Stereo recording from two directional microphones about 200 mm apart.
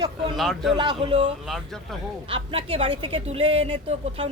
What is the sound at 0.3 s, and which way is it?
Speech, centre (ahead or behind).